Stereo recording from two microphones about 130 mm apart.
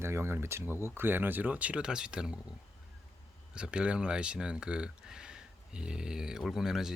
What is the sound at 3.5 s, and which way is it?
Speech, 10° right (ahead or behind).